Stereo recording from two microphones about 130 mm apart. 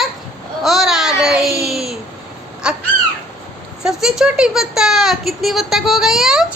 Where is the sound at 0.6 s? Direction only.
Centre (ahead or behind).